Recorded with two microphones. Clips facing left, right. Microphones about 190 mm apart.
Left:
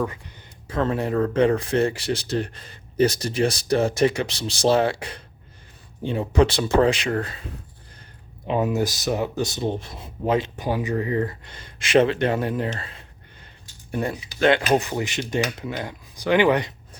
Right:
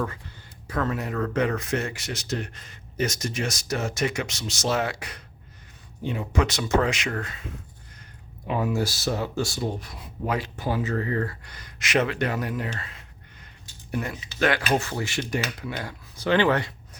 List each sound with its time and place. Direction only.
0.0 s speech: 15° left (ahead or behind); by 7.5 s 35° left (ahead or behind)
8.5 s speech: 20° left (ahead or behind)
14.4 s speech: 20° left (ahead or behind)